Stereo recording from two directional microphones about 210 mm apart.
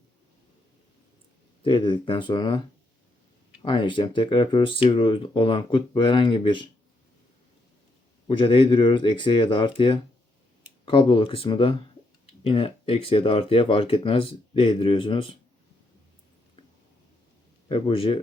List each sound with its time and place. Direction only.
1.6 s speech: 25° left (ahead or behind)
3.6 s speech: 25° left (ahead or behind)
8.3 s speech: 25° left (ahead or behind)
17.7 s speech: 25° left (ahead or behind)